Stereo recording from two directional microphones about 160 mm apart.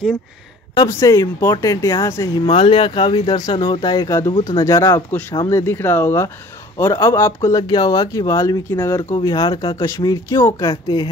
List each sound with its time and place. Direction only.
0.7 s speech: 20° left (ahead or behind)
2.4 s speech: 35° left (ahead or behind)